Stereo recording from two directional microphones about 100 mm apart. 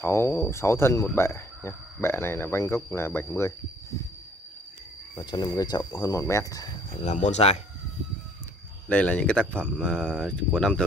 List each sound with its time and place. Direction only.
0.0 s speech: 25° left (ahead or behind)
5.1 s speech: 45° left (ahead or behind)
7.3 s speech: 90° left
8.8 s speech: 15° left (ahead or behind)